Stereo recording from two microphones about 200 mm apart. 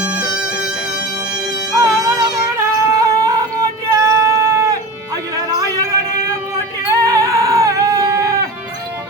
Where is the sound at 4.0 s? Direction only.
15° right (ahead or behind).